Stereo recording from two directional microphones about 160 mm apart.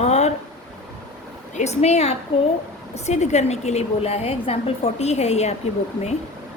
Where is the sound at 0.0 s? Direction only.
45° left (ahead or behind).